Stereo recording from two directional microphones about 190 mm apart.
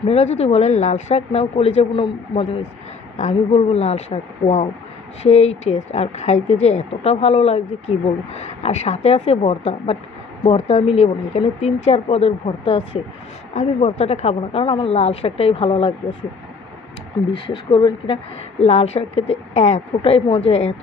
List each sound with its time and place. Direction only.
0.1 s a woman's voice: 35° left (ahead or behind)
17.5 s a woman's voice: 25° left (ahead or behind)